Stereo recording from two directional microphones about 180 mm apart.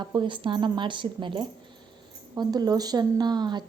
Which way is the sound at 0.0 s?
25° right (ahead or behind).